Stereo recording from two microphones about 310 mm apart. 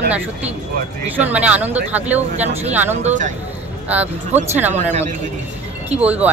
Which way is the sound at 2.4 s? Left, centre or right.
Right.